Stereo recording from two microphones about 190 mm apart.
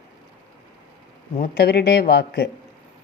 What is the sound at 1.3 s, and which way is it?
Speech, 55° left (ahead or behind).